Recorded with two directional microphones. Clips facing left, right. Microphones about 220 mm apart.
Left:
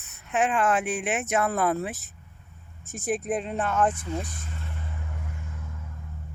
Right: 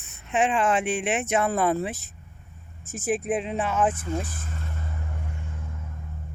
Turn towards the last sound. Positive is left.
turn(degrees=-30)  # may be behind; listen again after turning